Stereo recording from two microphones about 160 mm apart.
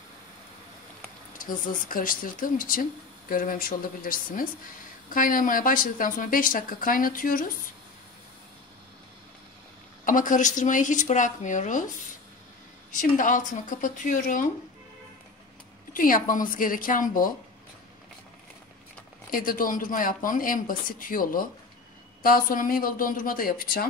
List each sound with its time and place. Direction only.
1.4 s speech: 55° left (ahead or behind)
10.0 s a woman's voice: 55° left (ahead or behind)
13.2 s speech: 55° left (ahead or behind)
15.9 s speech: 60° left (ahead or behind)
19.3 s speech: 60° left (ahead or behind)